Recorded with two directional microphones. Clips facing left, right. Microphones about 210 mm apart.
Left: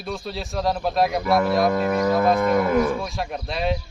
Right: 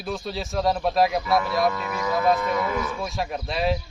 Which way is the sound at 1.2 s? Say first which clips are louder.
Left 3 dB; 50° left (ahead or behind).